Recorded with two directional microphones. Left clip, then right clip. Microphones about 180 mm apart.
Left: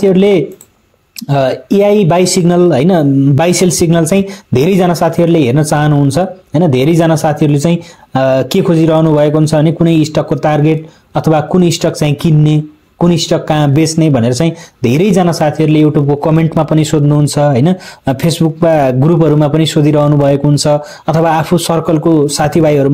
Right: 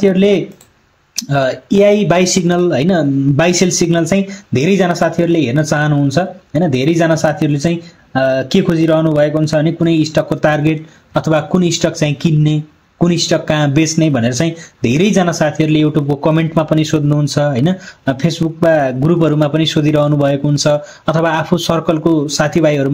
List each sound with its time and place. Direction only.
0.0 s speech: 35° left (ahead or behind)